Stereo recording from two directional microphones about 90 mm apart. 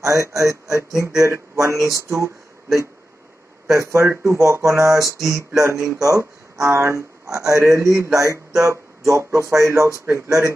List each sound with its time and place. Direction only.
0.0 s speech: 35° right (ahead or behind)